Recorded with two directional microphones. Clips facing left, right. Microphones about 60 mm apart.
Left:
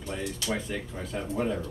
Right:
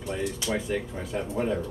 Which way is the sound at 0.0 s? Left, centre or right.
Centre.